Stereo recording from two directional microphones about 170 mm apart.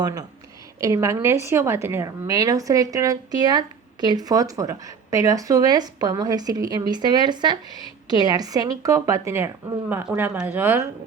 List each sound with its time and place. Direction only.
0.0 s speech: 20° right (ahead or behind)